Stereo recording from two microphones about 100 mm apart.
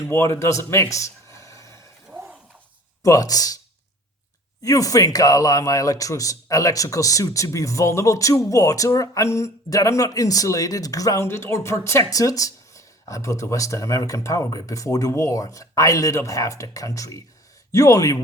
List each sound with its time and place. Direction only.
0.0 s speech: 30° left (ahead or behind)
2.0 s a sound: centre (ahead or behind)
3.0 s a man's voice: 35° left (ahead or behind)
4.6 s a man's voice: 35° left (ahead or behind)